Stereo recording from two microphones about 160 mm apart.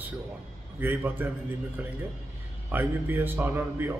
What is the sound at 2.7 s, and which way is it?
A man's voice, 10° right (ahead or behind).